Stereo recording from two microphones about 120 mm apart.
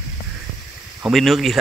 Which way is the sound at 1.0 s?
Centre (ahead or behind).